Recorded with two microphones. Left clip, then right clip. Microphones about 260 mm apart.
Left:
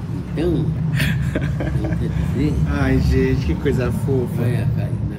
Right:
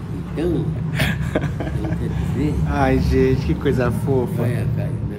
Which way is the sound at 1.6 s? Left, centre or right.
Centre.